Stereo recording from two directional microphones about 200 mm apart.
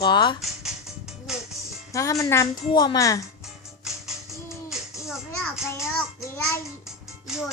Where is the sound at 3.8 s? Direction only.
Centre (ahead or behind).